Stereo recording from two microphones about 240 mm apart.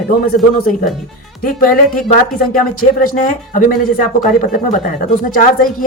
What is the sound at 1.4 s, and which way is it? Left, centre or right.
Speech, left.